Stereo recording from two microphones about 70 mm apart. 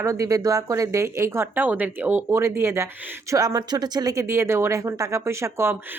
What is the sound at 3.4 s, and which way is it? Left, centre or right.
Speech, right.